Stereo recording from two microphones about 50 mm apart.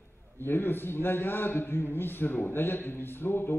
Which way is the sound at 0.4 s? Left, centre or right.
Left.